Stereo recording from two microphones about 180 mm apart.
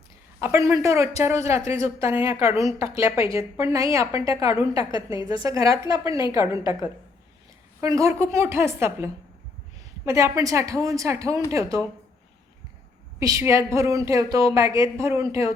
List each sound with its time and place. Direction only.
0.3 s a woman's voice: 15° right (ahead or behind)
5.1 s a woman's voice: 25° left (ahead or behind)
5.4 s a woman's voice: 20° right (ahead or behind)
8.0 s a woman's voice: 15° right (ahead or behind)
10.1 s a woman's voice: 15° right (ahead or behind)
13.1 s a woman's voice: 15° right (ahead or behind)